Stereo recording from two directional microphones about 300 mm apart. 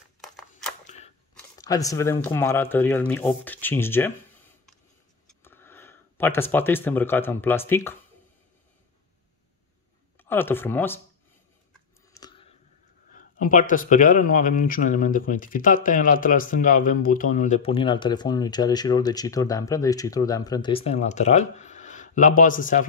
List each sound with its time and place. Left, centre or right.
0.2 s a sound: centre
0.8 s scissors: left
1.6 s speech: centre
5.3 s speech: centre
10.1 s speech: centre
12.1 s chewing: centre
13.1 s speech: left